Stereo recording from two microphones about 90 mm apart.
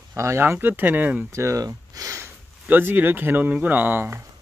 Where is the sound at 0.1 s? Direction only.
30° right (ahead or behind).